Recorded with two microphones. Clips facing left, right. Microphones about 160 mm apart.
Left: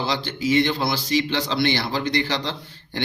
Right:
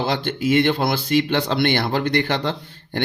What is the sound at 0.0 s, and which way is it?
A man's voice, 55° right (ahead or behind).